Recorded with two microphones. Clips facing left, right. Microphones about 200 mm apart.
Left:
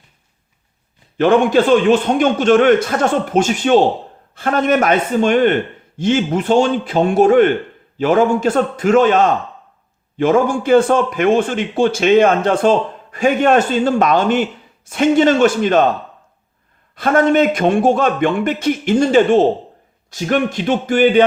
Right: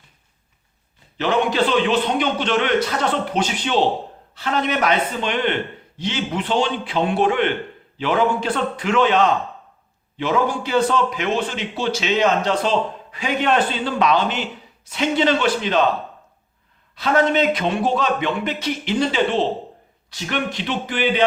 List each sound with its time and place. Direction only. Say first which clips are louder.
1.1 s a man's voice: left 8 dB; 50° left (ahead or behind)
16.9 s a man's voice: left 5 dB; 50° left (ahead or behind)